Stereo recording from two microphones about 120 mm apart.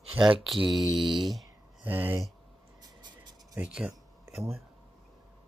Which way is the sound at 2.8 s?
35° right (ahead or behind).